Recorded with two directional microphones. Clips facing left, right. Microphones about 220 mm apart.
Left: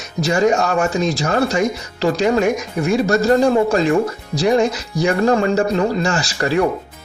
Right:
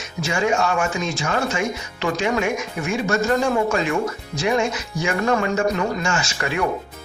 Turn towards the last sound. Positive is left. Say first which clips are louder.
# left 6 dB
turn(degrees=35)  # may be behind; listen again after turning